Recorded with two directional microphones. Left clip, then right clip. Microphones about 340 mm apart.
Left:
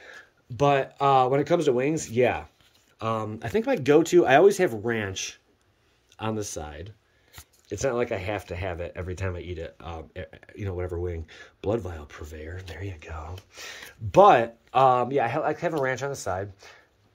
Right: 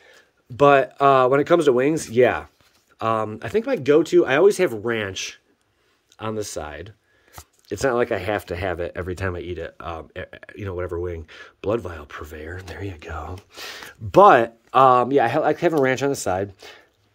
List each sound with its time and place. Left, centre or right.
0.6 s speech: centre